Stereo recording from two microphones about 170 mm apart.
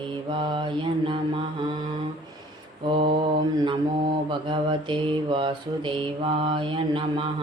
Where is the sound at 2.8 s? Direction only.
30° right (ahead or behind).